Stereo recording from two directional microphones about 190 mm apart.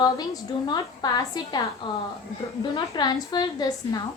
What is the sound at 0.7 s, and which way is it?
Speech, 20° left (ahead or behind).